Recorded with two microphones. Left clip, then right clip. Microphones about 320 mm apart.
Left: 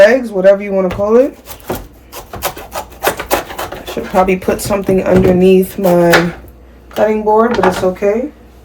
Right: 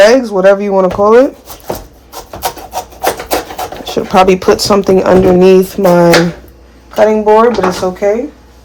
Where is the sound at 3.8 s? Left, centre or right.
Centre.